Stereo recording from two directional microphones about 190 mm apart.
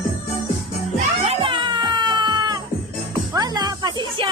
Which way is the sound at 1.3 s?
25° right (ahead or behind).